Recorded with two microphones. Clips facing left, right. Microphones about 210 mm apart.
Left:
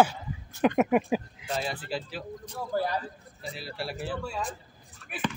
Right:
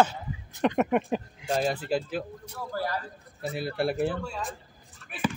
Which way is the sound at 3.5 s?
55° right (ahead or behind).